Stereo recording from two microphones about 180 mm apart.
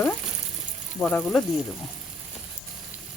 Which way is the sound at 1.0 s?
15° left (ahead or behind).